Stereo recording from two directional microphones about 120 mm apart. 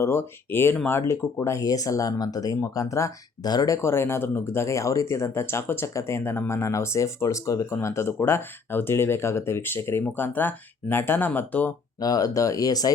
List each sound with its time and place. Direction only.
0.0 s speech: 20° left (ahead or behind)
11.9 s speech: 30° left (ahead or behind)